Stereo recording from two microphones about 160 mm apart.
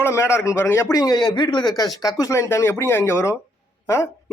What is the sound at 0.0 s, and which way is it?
A man's voice, 15° left (ahead or behind).